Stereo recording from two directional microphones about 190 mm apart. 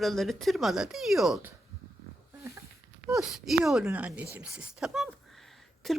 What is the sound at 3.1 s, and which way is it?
Speech, centre (ahead or behind).